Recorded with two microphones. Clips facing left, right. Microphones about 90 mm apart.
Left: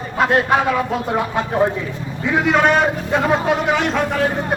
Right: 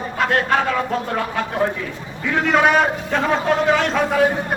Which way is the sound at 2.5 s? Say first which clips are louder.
Right 1 dB; centre (ahead or behind).